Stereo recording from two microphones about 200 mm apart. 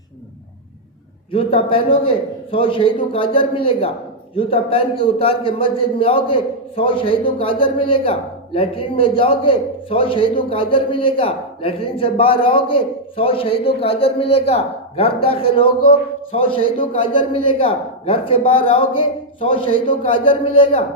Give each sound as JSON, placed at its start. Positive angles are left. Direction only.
{"t": 1.3, "sound": "a man's voice", "side_deg": 25}